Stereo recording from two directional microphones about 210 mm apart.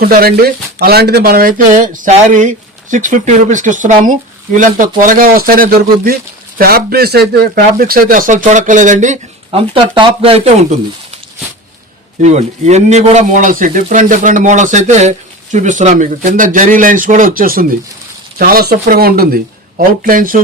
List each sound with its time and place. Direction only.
0.0 s speech: 45° right (ahead or behind)
12.2 s speech: 30° right (ahead or behind)